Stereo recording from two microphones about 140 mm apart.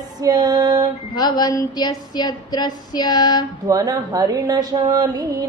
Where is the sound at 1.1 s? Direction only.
30° left (ahead or behind).